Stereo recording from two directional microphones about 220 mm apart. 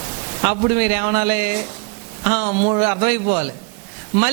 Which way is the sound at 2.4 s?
30° right (ahead or behind).